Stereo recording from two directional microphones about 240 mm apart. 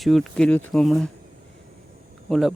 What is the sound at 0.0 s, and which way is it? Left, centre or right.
Speech, centre.